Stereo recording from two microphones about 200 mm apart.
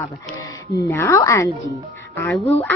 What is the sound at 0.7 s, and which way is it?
Speech, 15° left (ahead or behind).